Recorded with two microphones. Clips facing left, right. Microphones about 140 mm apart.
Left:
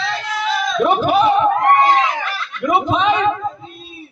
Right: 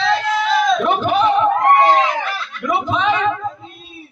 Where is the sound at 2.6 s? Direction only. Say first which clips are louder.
Left 2 dB; 20° left (ahead or behind).